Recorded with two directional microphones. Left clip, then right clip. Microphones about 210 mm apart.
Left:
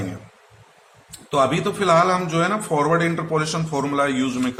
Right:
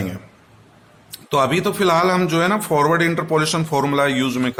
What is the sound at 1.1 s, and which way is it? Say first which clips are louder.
Speech: right 1 dB; 50° right (ahead or behind).